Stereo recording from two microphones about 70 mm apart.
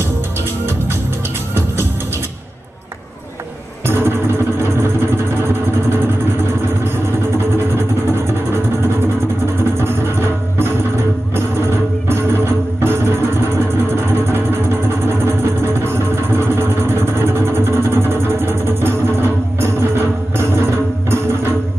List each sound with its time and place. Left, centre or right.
3.8 s music: right
7.3 s music: right
9.8 s music: right
15.0 s music: right